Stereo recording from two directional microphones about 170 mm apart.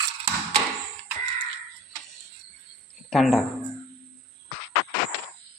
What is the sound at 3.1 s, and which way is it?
Speech, centre (ahead or behind).